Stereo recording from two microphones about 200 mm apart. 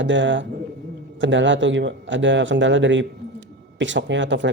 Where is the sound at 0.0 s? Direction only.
65° right (ahead or behind).